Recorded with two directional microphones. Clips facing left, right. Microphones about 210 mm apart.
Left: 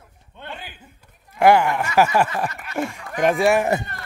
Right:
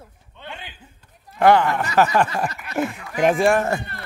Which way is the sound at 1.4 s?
10° left (ahead or behind).